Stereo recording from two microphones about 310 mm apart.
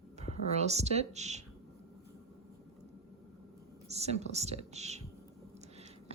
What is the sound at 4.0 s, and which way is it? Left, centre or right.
A woman's voice, right.